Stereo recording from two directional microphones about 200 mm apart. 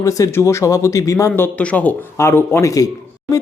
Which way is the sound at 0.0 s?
15° left (ahead or behind).